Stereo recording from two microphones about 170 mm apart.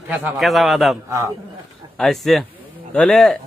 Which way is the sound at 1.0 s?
20° right (ahead or behind).